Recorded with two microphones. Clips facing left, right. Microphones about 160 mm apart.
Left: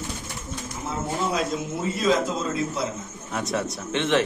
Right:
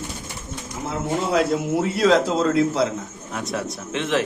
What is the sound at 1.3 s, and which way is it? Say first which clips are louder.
A man's voice: right 6 dB; 70° right (ahead or behind).